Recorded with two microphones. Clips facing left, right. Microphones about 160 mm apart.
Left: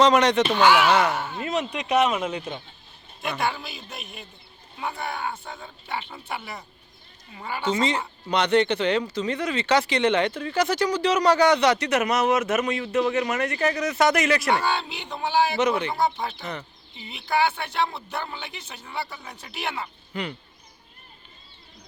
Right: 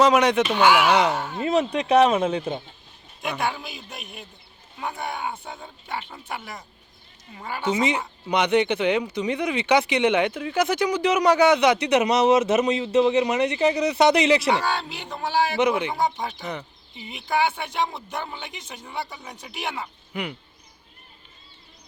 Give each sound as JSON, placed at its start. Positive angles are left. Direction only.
{"t": 0.0, "sound": "speech", "side_deg": -10}
{"t": 1.4, "sound": "speech", "side_deg": -30}
{"t": 3.2, "sound": "a man's voice", "side_deg": 0}
{"t": 6.3, "sound": "speech", "side_deg": 5}
{"t": 7.3, "sound": "speech", "side_deg": -5}
{"t": 14.5, "sound": "speech", "side_deg": -10}
{"t": 14.8, "sound": "speech", "side_deg": -40}
{"t": 15.1, "sound": "speech", "side_deg": -10}